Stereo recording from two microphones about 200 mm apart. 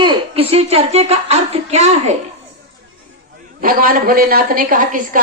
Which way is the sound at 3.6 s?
45° right (ahead or behind).